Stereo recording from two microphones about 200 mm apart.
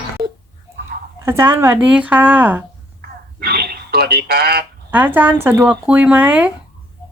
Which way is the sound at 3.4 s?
50° right (ahead or behind).